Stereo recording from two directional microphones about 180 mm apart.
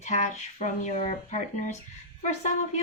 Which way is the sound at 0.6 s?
45° left (ahead or behind).